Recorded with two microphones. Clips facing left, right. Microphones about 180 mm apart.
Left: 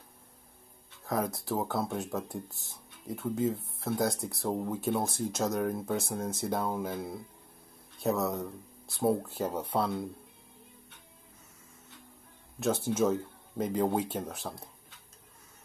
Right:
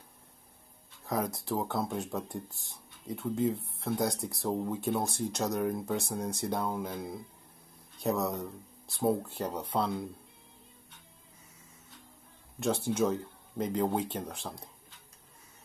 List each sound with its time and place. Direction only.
1.0 s speech: centre (ahead or behind)
12.5 s speech: centre (ahead or behind)